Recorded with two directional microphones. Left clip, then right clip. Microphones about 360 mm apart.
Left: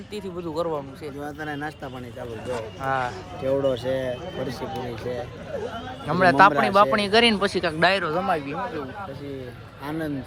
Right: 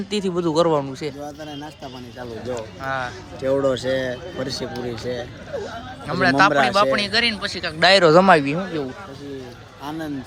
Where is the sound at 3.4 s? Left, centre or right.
Right.